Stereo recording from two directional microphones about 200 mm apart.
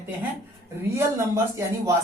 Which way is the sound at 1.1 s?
15° right (ahead or behind).